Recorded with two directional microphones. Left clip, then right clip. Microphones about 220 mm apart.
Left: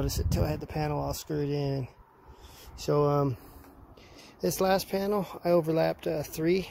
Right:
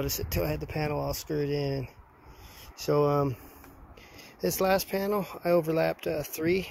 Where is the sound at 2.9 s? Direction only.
5° left (ahead or behind).